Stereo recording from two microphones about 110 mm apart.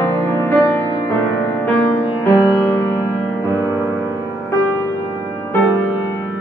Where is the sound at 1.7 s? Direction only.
15° left (ahead or behind).